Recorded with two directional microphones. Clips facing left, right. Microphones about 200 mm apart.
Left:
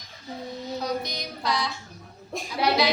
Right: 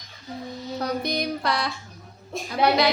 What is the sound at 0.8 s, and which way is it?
Music, 60° right (ahead or behind).